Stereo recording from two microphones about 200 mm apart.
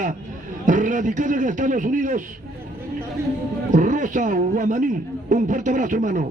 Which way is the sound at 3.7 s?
40° right (ahead or behind).